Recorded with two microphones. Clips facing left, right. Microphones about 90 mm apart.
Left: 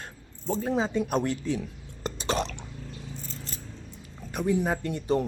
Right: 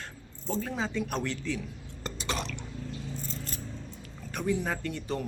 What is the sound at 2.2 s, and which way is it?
Drip, 30° left (ahead or behind).